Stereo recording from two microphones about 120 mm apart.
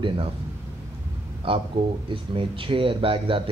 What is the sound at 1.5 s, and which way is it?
Speech, 45° right (ahead or behind).